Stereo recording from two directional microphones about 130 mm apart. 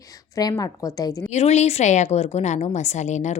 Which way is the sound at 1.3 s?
60° left (ahead or behind).